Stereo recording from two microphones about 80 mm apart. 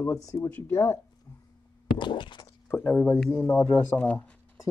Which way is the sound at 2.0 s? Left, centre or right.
Left.